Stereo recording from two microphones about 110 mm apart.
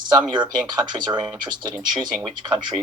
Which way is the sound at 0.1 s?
40° right (ahead or behind).